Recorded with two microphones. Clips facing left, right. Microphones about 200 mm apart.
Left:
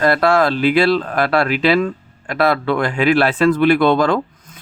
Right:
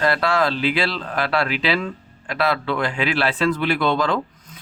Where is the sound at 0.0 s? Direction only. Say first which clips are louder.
Left 5 dB; 50° left (ahead or behind).